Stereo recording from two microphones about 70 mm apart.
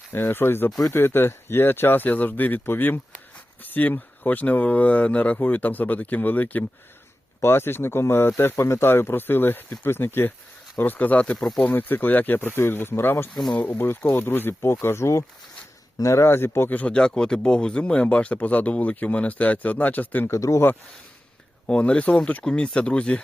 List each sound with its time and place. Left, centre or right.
0.1 s speech: left
7.4 s speech: left
16.7 s speech: centre
20.3 s speech: left
21.7 s speech: centre